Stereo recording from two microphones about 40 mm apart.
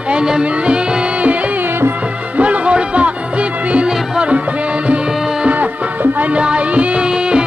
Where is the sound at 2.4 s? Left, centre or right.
Right.